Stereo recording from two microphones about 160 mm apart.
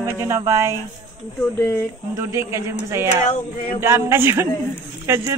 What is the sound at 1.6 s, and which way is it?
Speech, 15° left (ahead or behind).